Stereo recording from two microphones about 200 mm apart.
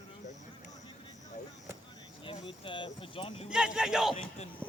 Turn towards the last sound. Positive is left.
turn(degrees=0)  # may be behind; listen again after turning